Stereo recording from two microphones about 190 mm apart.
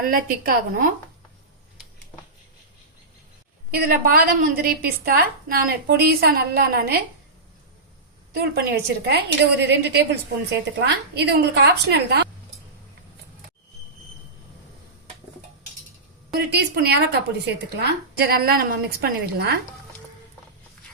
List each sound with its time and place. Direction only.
0.0 s a woman's voice: 45° right (ahead or behind)
3.7 s a woman's voice: 55° right (ahead or behind)
8.4 s speech: 55° right (ahead or behind)
16.3 s speech: 60° right (ahead or behind)